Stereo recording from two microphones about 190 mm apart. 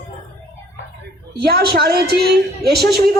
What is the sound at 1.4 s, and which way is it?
Speech, 55° right (ahead or behind).